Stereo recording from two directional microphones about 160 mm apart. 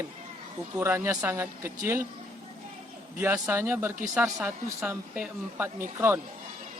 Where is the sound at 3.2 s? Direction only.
15° right (ahead or behind).